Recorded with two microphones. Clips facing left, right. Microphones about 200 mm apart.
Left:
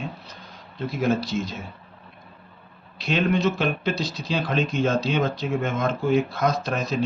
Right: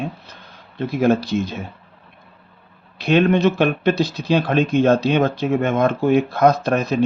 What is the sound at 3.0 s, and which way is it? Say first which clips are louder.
Speech: right 7 dB; 60° right (ahead or behind).